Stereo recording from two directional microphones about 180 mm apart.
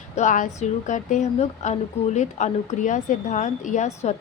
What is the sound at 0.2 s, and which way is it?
A woman's voice, 45° left (ahead or behind).